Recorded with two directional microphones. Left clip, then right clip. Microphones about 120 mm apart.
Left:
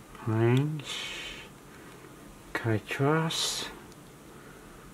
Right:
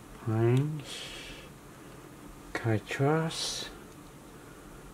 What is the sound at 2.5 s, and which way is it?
Speech, 15° left (ahead or behind).